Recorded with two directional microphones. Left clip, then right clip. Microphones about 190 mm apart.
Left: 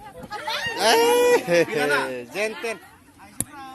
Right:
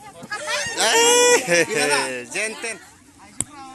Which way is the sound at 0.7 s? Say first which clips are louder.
Right 1 dB; 10° left (ahead or behind).